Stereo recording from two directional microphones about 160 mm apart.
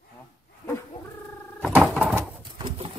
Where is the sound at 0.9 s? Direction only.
30° left (ahead or behind).